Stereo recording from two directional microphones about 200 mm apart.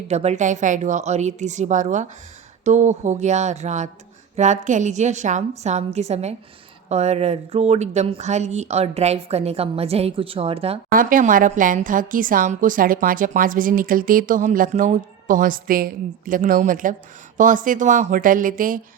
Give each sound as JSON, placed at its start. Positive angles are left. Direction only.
{"t": 0.1, "sound": "speech", "side_deg": -35}
{"t": 10.9, "sound": "a woman's voice", "side_deg": -40}